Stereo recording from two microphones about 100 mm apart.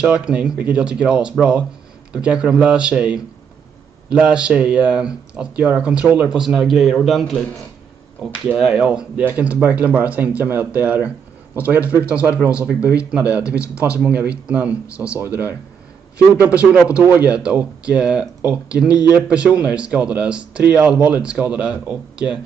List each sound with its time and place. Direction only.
0.0 s a man's voice: 10° right (ahead or behind)
8.5 s speech: 5° right (ahead or behind)
16.3 s speech: 15° right (ahead or behind)